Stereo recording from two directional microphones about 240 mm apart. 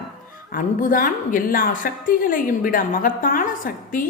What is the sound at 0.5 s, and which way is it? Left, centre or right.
A woman's voice, left.